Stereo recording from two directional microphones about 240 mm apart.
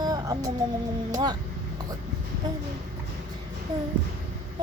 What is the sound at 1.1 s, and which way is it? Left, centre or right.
Speech, centre.